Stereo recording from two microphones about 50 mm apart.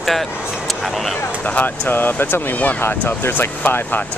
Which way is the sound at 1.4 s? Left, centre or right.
Left.